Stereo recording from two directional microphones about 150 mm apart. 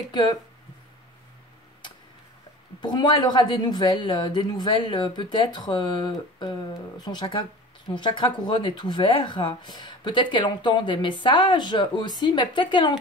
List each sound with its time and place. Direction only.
0.1 s speech: 25° left (ahead or behind)
2.8 s speech: 30° left (ahead or behind)